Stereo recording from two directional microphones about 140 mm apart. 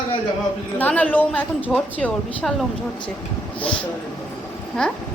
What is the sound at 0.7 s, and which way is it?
A woman's voice, 10° left (ahead or behind).